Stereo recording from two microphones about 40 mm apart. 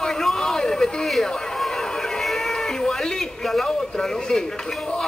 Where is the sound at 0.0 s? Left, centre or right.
Centre.